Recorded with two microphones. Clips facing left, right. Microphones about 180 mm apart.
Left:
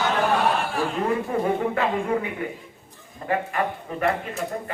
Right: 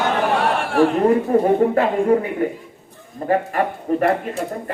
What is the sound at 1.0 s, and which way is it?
Speech, 40° right (ahead or behind).